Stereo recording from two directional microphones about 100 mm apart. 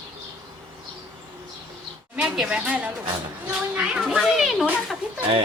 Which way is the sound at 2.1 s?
5° right (ahead or behind).